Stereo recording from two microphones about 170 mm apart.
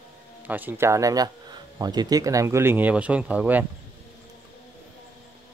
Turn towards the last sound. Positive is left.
turn(degrees=-10)  # may be behind; listen again after turning